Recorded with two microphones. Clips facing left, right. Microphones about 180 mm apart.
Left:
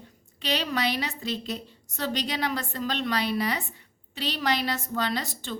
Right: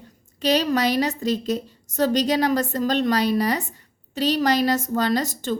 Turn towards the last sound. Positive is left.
turn(degrees=-45)  # may be behind; listen again after turning